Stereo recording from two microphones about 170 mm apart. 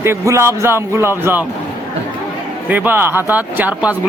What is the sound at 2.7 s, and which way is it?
A man's voice, 10° right (ahead or behind).